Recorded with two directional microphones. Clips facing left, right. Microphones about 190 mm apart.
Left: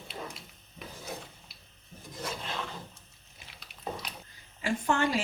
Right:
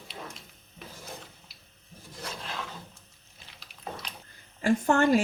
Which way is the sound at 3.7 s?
Centre (ahead or behind).